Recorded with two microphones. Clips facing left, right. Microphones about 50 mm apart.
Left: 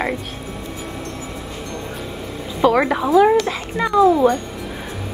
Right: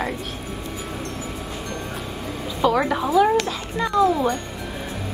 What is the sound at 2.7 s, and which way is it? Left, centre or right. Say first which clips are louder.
Speech: left 4 dB; left.